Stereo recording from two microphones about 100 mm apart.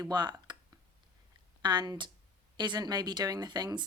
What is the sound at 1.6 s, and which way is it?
Speech, 45° right (ahead or behind).